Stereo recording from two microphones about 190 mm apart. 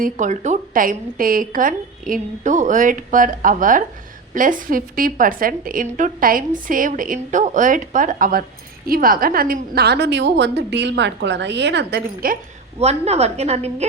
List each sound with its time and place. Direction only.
0.0 s a woman's voice: 40° right (ahead or behind)
12.8 s a woman's voice: 35° right (ahead or behind)